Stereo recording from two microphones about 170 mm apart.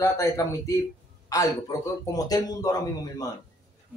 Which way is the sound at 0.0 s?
15° left (ahead or behind).